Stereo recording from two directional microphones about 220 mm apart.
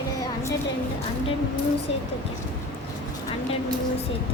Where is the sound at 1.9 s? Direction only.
25° left (ahead or behind).